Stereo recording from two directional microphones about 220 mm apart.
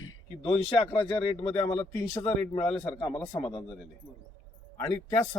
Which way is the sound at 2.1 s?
25° left (ahead or behind).